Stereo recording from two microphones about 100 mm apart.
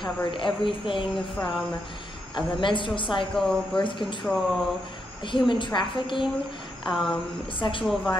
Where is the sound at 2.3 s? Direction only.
55° left (ahead or behind).